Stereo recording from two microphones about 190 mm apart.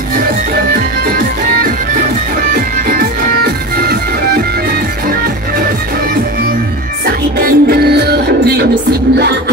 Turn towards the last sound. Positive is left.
turn(degrees=-55)  # may be behind; listen again after turning